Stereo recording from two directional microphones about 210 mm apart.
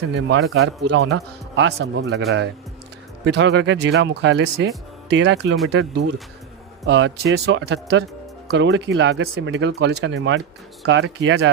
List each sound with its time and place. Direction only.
0.1 s speech: 55° right (ahead or behind)
3.2 s speech: 55° right (ahead or behind)